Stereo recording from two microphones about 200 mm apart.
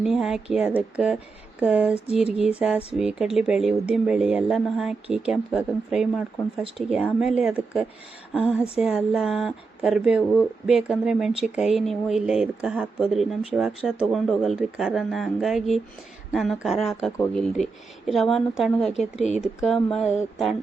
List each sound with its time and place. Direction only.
0.0 s speech: 5° right (ahead or behind)
19.1 s speech: 35° left (ahead or behind)
19.4 s speech: centre (ahead or behind)